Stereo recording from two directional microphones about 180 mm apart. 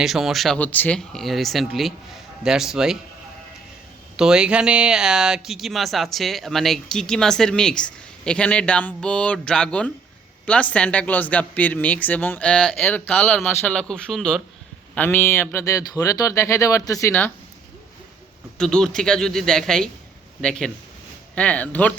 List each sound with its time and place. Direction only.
0.0 s speech: centre (ahead or behind)
4.2 s speech: 5° right (ahead or behind)
18.5 s speech: 5° left (ahead or behind)